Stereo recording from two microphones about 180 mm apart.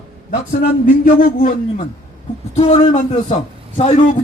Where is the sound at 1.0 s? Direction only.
50° left (ahead or behind).